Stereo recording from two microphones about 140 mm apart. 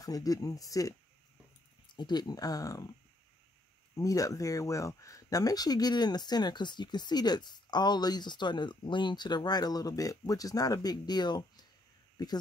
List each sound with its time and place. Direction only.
0.0 s speech: 25° left (ahead or behind)
2.0 s speech: 30° left (ahead or behind)
3.9 s speech: 25° left (ahead or behind)